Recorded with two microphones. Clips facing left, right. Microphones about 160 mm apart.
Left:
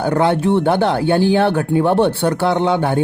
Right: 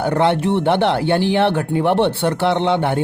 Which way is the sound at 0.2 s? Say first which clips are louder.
Left 2 dB; 25° right (ahead or behind).